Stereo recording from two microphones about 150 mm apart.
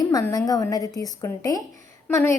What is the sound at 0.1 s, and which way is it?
A woman's voice, 25° left (ahead or behind).